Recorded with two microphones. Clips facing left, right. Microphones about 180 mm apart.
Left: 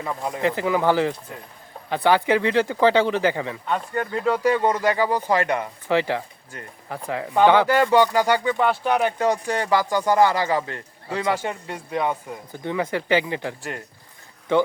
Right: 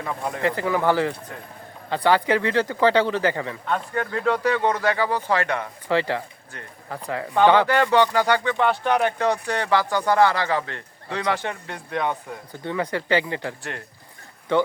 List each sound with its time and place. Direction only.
0.0 s speech: 5° left (ahead or behind)
0.4 s speech: 20° left (ahead or behind)